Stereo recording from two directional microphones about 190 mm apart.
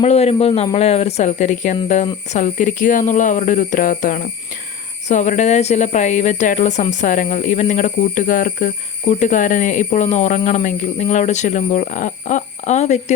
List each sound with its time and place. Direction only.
0.0 s speech: 35° left (ahead or behind)